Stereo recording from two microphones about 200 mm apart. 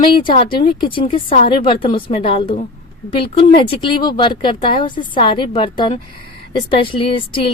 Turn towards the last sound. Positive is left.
turn(degrees=25)  # may be behind; listen again after turning